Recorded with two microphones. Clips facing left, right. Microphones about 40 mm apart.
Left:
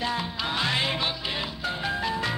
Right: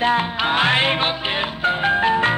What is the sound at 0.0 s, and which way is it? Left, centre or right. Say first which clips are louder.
Music: right 10 dB; right.